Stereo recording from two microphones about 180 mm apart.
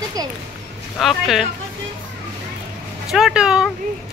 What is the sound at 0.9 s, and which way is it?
Speech, centre (ahead or behind).